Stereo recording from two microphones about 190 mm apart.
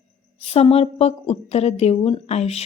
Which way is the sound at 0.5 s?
30° left (ahead or behind).